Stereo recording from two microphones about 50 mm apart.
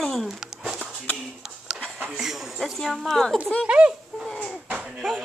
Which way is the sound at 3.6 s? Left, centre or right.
Right.